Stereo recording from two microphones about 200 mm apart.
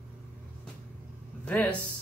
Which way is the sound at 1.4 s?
10° left (ahead or behind).